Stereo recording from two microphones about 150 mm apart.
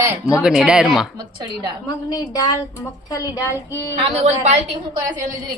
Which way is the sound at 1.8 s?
25° left (ahead or behind).